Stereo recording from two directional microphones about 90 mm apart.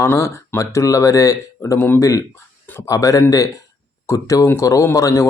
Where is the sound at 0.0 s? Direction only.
30° left (ahead or behind).